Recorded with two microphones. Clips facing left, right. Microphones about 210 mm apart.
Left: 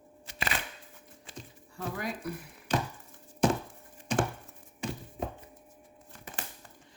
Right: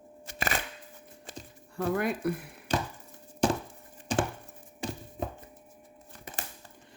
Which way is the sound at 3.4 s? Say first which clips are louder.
Even; 30° right (ahead or behind).